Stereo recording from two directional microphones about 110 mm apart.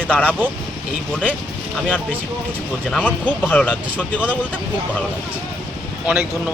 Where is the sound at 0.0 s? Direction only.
10° left (ahead or behind).